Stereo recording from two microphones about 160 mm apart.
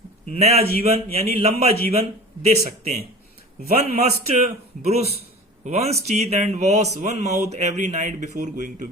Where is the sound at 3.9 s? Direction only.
45° right (ahead or behind).